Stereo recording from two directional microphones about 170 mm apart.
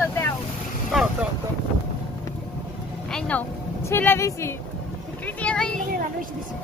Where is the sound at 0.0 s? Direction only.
15° left (ahead or behind).